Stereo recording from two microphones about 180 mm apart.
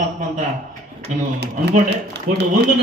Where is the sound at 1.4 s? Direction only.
70° right (ahead or behind).